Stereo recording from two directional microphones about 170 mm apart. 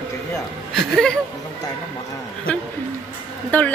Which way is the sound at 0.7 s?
5° left (ahead or behind).